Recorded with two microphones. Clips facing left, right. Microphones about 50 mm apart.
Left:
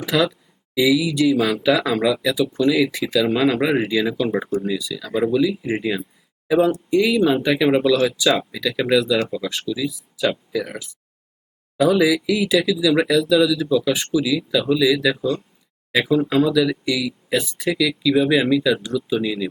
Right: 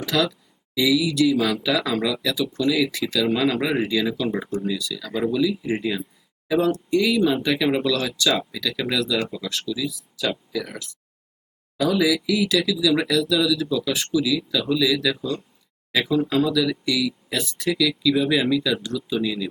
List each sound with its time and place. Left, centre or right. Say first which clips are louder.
0.0 s speech: left 3 dB; centre
14.2 s speech: even; centre